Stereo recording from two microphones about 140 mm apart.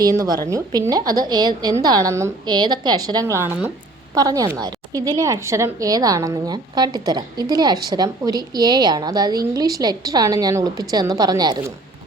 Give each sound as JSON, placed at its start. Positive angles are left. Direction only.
{"t": 0.0, "sound": "a woman's voice", "side_deg": -25}